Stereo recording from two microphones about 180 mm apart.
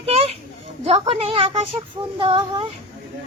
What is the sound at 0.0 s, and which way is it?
Children playing, 35° right (ahead or behind).